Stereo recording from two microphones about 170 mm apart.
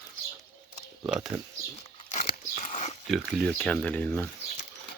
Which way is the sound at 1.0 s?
5° right (ahead or behind).